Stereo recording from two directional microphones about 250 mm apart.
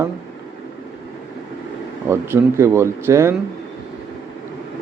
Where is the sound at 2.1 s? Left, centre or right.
Centre.